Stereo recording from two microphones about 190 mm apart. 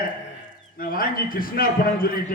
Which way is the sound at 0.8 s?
50° left (ahead or behind).